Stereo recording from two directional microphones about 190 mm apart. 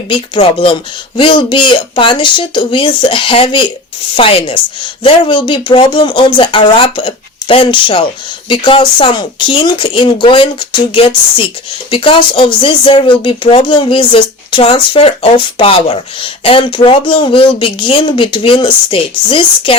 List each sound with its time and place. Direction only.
0.1 s speech: 25° left (ahead or behind)